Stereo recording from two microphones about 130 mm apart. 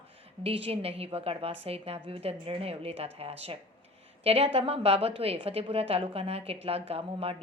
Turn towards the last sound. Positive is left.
turn(degrees=-50)  # may be behind; listen again after turning